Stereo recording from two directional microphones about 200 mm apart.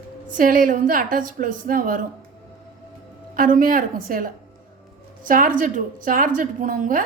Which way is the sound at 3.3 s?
45° right (ahead or behind).